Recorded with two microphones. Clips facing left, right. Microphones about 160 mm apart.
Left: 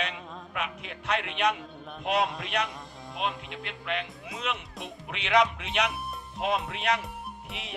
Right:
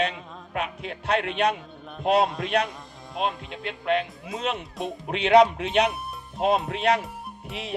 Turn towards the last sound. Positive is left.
turn(degrees=-35)  # may be behind; listen again after turning